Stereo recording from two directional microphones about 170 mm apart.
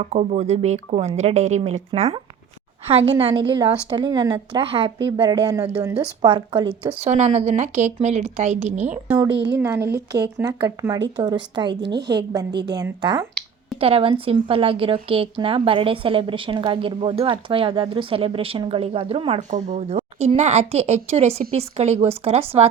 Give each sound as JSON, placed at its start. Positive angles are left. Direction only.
{"t": 0.0, "sound": "a woman's voice", "side_deg": -40}
{"t": 8.8, "sound": "speech", "side_deg": -10}
{"t": 9.3, "sound": "a woman's voice", "side_deg": -90}
{"t": 9.6, "sound": "a woman's voice", "side_deg": -15}
{"t": 12.5, "sound": "a woman's voice", "side_deg": -80}
{"t": 12.7, "sound": "a woman's voice", "side_deg": -25}
{"t": 19.4, "sound": "a woman's voice", "side_deg": -45}